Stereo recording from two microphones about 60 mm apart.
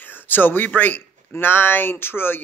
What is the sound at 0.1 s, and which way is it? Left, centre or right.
Speech, left.